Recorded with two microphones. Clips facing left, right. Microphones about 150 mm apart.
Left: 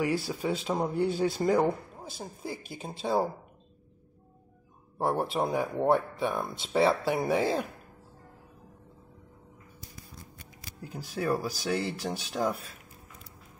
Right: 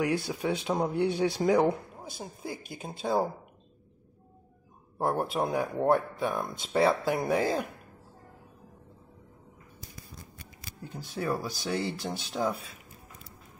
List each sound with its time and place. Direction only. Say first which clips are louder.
0.0 s speech: even; centre (ahead or behind)
4.9 s speech: even; centre (ahead or behind)
10.8 s speech: left 2 dB; 5° left (ahead or behind)